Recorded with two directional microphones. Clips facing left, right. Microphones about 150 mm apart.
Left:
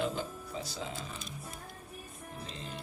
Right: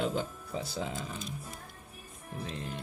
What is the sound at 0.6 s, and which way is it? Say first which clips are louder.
Speech: right 4 dB; 55° right (ahead or behind).